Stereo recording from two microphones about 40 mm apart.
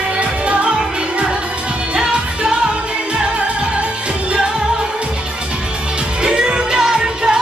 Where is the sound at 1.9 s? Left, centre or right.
Right.